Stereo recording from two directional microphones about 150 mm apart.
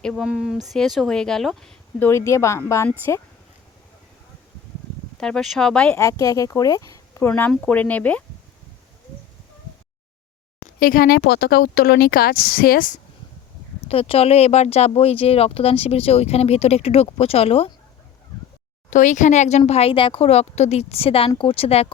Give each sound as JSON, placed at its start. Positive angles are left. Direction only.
{"t": 0.0, "sound": "speech", "side_deg": 0}
{"t": 2.0, "sound": "speech", "side_deg": 15}
{"t": 5.2, "sound": "speech", "side_deg": 5}
{"t": 6.0, "sound": "speech", "side_deg": 20}
{"t": 10.6, "sound": "speech", "side_deg": 70}
{"t": 13.8, "sound": "speech", "side_deg": 40}
{"t": 18.9, "sound": "speech", "side_deg": 55}